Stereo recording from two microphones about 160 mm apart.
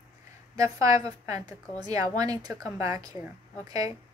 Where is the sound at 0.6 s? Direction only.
20° right (ahead or behind).